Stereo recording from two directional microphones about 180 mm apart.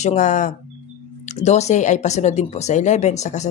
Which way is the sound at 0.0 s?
40° left (ahead or behind).